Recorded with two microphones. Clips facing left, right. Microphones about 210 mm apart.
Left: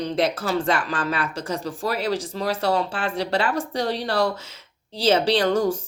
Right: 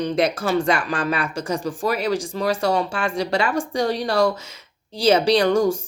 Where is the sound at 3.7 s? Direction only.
15° right (ahead or behind).